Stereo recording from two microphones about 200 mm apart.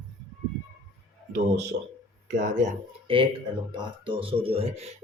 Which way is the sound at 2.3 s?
40° right (ahead or behind).